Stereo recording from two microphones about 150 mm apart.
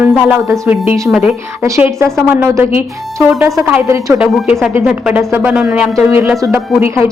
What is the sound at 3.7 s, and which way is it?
Speech, 15° right (ahead or behind).